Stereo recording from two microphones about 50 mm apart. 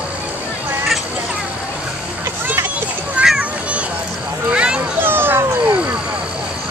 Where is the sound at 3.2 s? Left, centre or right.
Right.